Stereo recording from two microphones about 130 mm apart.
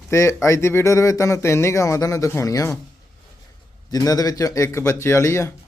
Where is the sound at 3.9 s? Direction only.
30° left (ahead or behind).